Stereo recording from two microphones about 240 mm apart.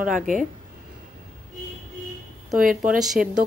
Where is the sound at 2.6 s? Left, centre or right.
Right.